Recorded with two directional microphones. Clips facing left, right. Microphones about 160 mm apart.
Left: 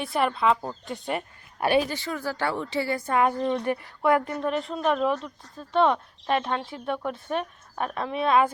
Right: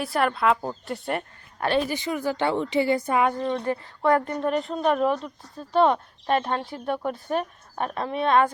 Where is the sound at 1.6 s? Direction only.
10° left (ahead or behind).